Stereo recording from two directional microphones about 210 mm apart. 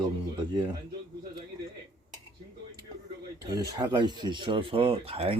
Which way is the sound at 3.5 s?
20° right (ahead or behind).